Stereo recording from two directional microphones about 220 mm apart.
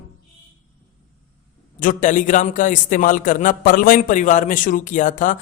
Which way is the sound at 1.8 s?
35° left (ahead or behind).